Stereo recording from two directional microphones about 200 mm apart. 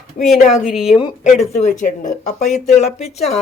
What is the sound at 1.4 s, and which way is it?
Speech, 35° left (ahead or behind).